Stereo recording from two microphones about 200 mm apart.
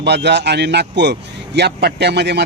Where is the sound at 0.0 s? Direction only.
55° right (ahead or behind).